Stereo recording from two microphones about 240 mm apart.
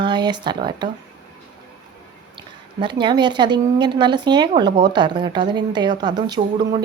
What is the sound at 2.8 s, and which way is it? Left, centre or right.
A woman's voice, centre.